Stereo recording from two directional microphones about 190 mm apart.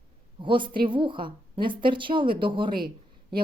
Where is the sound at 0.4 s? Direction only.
25° right (ahead or behind).